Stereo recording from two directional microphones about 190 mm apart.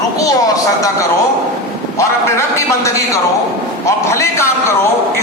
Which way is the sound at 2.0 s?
15° left (ahead or behind).